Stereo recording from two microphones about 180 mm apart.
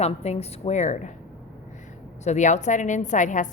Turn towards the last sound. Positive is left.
turn(degrees=45)  # may be behind; listen again after turning